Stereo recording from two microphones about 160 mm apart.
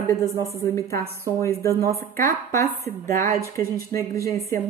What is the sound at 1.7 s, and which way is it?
Speech, 70° right (ahead or behind).